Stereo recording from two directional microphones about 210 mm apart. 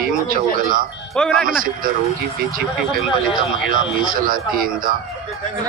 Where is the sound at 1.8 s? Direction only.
45° right (ahead or behind).